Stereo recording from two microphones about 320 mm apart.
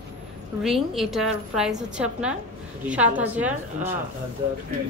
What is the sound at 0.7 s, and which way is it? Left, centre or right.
A woman's voice, centre.